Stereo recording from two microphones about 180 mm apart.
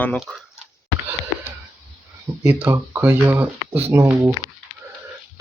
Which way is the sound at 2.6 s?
15° right (ahead or behind).